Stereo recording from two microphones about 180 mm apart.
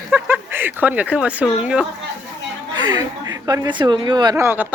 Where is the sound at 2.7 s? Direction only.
20° right (ahead or behind).